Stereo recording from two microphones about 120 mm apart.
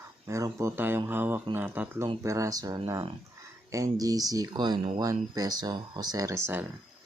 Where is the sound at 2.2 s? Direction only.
25° right (ahead or behind).